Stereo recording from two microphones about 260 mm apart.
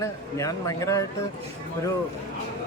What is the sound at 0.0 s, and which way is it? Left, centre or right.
Speech, centre.